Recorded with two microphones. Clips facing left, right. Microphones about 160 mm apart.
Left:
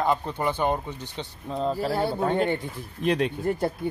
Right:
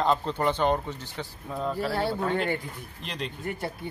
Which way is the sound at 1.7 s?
35° left (ahead or behind).